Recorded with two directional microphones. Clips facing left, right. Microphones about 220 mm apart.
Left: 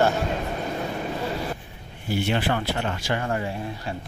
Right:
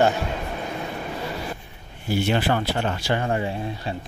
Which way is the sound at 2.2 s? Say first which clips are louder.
Right 2 dB; 40° right (ahead or behind).